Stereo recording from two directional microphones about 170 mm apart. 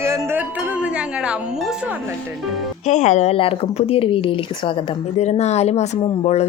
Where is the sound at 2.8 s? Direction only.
45° left (ahead or behind).